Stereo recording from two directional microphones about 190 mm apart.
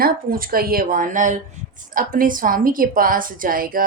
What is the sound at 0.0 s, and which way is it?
A woman's voice, 50° right (ahead or behind).